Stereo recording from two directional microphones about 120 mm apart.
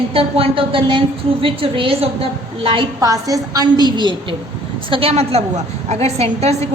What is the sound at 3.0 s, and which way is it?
A woman's voice, 30° right (ahead or behind).